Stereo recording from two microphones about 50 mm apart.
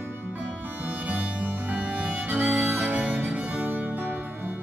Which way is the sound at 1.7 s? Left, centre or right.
Right.